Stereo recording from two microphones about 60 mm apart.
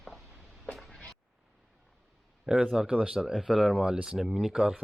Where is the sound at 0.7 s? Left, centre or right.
Centre.